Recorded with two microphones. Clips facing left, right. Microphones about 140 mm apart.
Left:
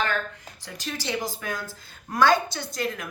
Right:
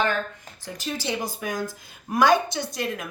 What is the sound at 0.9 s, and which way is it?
A woman's voice, 15° right (ahead or behind).